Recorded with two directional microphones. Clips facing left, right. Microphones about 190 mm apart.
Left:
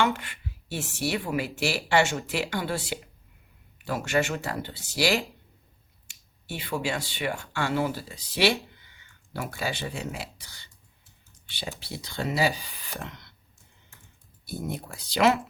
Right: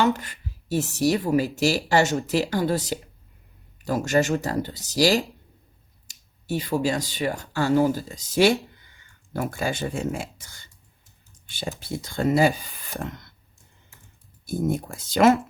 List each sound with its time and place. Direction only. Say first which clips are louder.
0.0 s speech: right 4 dB; 40° right (ahead or behind)
14.4 s speech: right 8 dB; 45° right (ahead or behind)